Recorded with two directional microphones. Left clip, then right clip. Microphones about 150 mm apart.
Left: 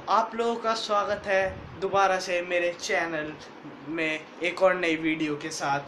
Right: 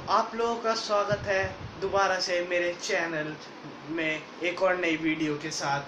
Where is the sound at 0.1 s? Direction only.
45° left (ahead or behind).